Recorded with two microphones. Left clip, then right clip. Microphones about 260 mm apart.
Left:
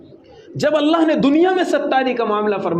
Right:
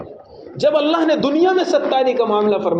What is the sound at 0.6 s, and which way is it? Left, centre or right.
A man's voice, left.